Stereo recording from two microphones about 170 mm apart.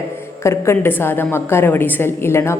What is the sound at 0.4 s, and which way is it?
A woman's voice, 15° left (ahead or behind).